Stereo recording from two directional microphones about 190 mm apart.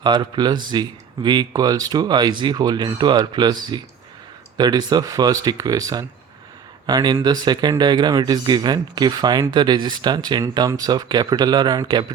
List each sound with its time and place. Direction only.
0.0 s speech: 25° right (ahead or behind)